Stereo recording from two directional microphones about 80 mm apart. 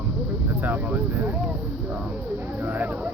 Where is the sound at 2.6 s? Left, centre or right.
Right.